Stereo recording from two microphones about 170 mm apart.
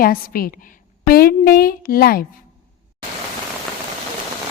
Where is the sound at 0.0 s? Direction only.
60° left (ahead or behind).